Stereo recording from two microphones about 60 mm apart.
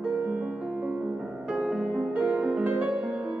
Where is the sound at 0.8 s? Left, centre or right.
Right.